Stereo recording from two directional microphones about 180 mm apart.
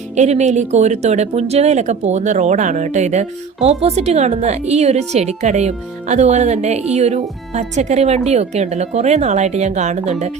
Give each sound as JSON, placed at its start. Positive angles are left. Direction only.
{"t": 0.2, "sound": "speech", "side_deg": -40}